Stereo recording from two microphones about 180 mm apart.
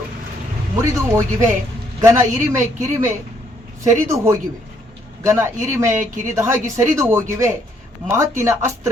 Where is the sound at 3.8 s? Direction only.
15° right (ahead or behind).